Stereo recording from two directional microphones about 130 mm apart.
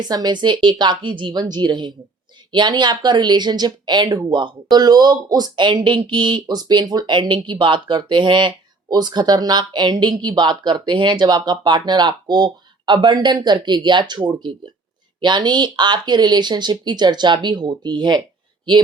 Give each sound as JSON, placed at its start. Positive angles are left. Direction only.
{"t": 0.0, "sound": "speech", "side_deg": -35}